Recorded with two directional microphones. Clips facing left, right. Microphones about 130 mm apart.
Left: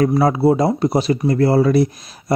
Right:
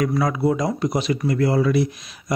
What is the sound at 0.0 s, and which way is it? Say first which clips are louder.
Speech: left 6 dB; 30° left (ahead or behind).